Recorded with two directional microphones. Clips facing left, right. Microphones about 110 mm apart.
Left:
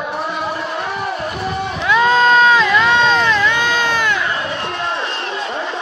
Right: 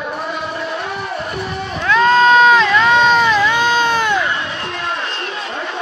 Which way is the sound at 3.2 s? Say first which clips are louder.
Right 2 dB; 15° right (ahead or behind).